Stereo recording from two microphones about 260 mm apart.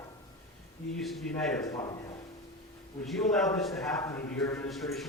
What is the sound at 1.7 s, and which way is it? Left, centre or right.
Speech, centre.